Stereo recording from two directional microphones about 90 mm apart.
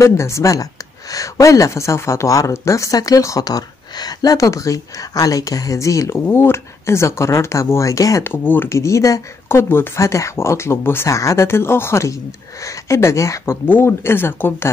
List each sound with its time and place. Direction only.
0.0 s speech: 35° left (ahead or behind)
8.2 s speech: 25° left (ahead or behind)
8.7 s speech: 35° left (ahead or behind)
9.5 s speech: 25° left (ahead or behind)